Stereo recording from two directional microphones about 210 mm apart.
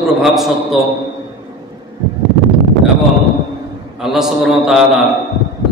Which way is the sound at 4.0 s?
Centre (ahead or behind).